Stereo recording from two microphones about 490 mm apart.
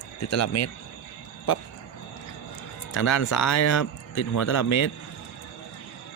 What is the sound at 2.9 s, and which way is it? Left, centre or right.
Speech, left.